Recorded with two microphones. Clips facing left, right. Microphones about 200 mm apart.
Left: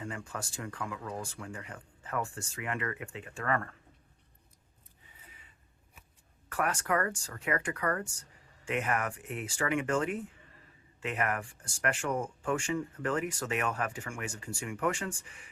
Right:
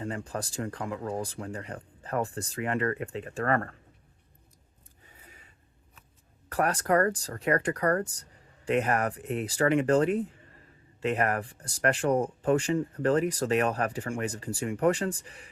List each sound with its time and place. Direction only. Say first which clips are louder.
0.0 s speech: right 6 dB; 35° right (ahead or behind)
6.5 s speech: right 6 dB; 35° right (ahead or behind)